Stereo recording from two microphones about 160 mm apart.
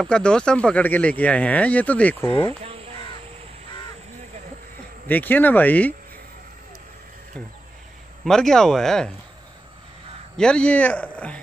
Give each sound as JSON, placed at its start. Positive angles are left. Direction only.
{"t": 0.0, "sound": "speech", "side_deg": 5}
{"t": 2.6, "sound": "crow", "side_deg": -35}
{"t": 5.0, "sound": "speech", "side_deg": 10}
{"t": 8.2, "sound": "speech", "side_deg": 5}
{"t": 10.3, "sound": "speech", "side_deg": 5}